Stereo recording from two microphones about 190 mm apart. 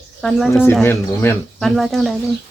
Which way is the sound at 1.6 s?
Centre (ahead or behind).